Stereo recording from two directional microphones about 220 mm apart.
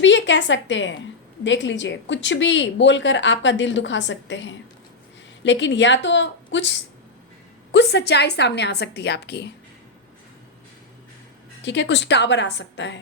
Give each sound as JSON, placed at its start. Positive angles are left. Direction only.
{"t": 0.0, "sound": "a woman's voice", "side_deg": 55}
{"t": 11.6, "sound": "a woman's voice", "side_deg": 55}